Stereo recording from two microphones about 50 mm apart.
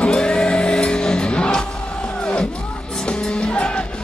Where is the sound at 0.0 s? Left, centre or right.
Centre.